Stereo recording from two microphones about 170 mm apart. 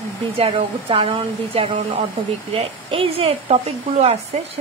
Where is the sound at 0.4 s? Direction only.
35° right (ahead or behind).